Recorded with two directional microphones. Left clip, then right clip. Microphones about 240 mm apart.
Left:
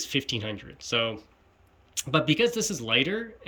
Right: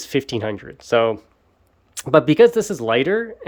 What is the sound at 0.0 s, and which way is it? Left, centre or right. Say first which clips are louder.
Speech: right 7 dB; centre.